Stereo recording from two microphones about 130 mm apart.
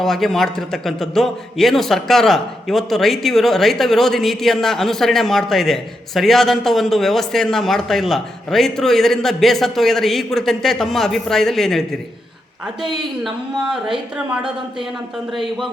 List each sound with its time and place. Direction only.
0.0 s a man's voice: 5° left (ahead or behind)
13.2 s a man's voice: 5° right (ahead or behind)
15.3 s a man's voice: centre (ahead or behind)